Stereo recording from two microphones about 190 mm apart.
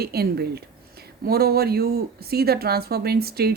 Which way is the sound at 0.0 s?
55° right (ahead or behind).